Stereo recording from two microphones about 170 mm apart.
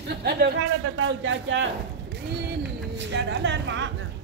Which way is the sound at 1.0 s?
90° right.